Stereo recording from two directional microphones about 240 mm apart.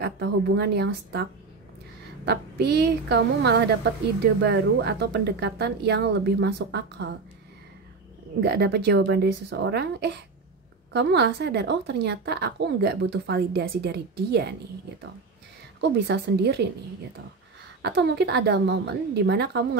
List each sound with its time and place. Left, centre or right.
0.0 s a woman's voice: right
2.2 s a woman's voice: right
8.4 s a woman's voice: right
15.8 s a woman's voice: right
17.8 s a woman's voice: right